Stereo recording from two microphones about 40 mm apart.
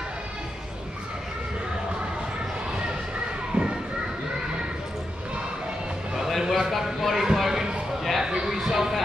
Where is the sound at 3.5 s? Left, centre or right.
Right.